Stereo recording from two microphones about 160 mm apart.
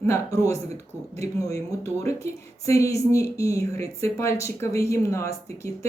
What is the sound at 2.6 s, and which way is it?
Speech, 20° left (ahead or behind).